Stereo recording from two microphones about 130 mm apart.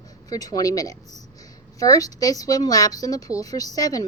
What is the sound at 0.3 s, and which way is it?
Speech, 30° left (ahead or behind).